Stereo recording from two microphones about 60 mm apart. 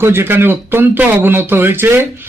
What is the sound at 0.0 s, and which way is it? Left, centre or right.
Speech, right.